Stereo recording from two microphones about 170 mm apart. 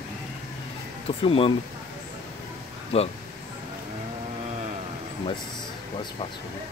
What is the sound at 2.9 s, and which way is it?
Speech, 35° left (ahead or behind).